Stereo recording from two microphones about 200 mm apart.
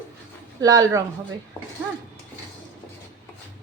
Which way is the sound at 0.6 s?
15° right (ahead or behind).